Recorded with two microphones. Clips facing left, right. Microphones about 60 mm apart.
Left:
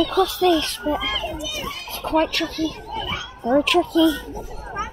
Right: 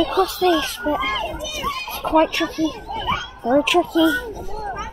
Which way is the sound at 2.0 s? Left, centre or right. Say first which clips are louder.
Right 3 dB; centre.